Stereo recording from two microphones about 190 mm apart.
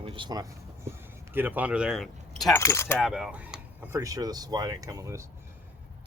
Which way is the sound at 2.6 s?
15° left (ahead or behind).